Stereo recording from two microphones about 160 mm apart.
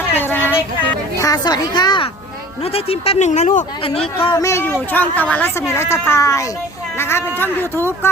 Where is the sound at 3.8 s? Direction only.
40° left (ahead or behind).